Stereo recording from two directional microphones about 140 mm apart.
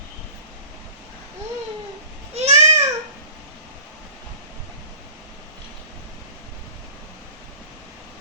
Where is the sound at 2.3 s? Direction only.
55° right (ahead or behind).